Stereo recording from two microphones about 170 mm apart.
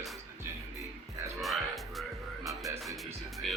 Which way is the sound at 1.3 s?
Centre (ahead or behind).